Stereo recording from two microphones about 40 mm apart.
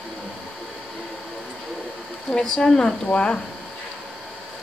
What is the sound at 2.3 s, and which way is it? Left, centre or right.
Speech, centre.